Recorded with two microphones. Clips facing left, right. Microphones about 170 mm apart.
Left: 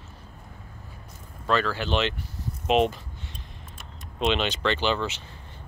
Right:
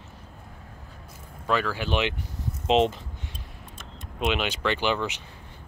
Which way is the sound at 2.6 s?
25° right (ahead or behind).